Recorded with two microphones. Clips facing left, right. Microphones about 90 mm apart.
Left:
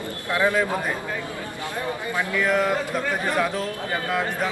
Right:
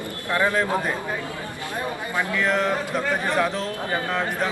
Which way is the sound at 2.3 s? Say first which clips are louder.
Left 1 dB; 5° left (ahead or behind).